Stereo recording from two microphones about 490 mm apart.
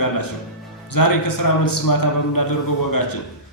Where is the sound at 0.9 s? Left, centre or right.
Left.